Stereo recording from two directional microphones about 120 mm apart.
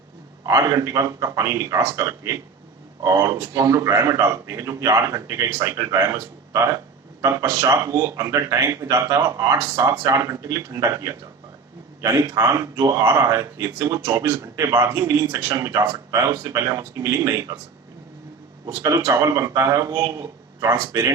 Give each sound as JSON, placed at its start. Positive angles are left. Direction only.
{"t": 0.4, "sound": "speech", "side_deg": -25}
{"t": 18.7, "sound": "speech", "side_deg": -25}